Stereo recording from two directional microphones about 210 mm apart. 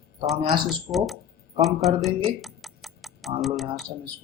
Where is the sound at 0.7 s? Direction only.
Centre (ahead or behind).